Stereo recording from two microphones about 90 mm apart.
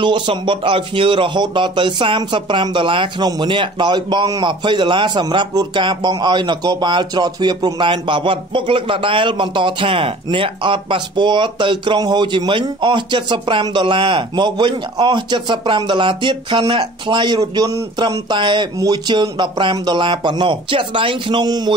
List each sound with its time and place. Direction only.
0.0 s speech: 65° right (ahead or behind); by 17.8 s 40° right (ahead or behind)
18.3 s speech: 60° right (ahead or behind)